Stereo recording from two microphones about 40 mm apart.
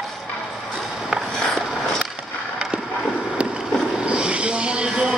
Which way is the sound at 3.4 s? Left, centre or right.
Right.